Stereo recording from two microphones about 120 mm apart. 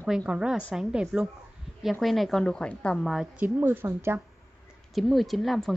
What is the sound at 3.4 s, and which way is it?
Speech, 15° right (ahead or behind).